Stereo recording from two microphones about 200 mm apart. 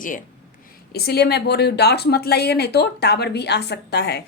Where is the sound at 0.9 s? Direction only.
50° left (ahead or behind).